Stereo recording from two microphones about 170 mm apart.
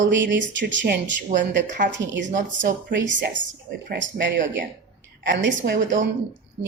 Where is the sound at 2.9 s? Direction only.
90° right.